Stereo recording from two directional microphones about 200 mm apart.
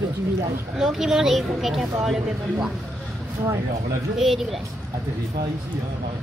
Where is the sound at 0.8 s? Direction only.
Centre (ahead or behind).